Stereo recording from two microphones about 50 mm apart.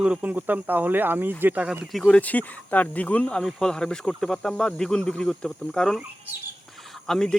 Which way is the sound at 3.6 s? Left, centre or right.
Centre.